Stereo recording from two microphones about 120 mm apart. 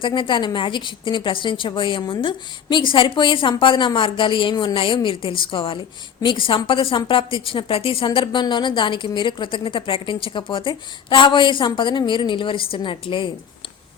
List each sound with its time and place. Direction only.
0.0 s a woman's voice: 40° left (ahead or behind)